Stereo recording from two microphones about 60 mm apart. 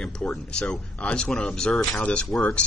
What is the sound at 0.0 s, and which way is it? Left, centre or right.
Speech, centre.